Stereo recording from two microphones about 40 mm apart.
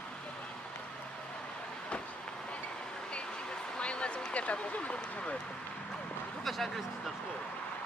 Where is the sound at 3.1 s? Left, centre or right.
Left.